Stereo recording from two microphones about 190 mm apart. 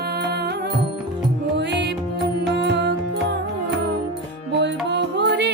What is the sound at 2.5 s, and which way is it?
Music, 65° right (ahead or behind).